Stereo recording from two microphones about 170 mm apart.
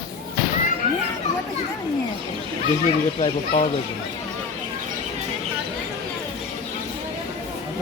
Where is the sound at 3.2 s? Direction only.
40° left (ahead or behind).